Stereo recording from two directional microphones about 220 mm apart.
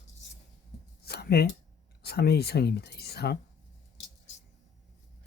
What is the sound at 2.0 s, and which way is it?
Speech, 45° left (ahead or behind).